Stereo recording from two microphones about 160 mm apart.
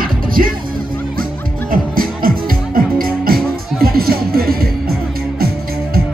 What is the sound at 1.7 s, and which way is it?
Music, 65° right (ahead or behind).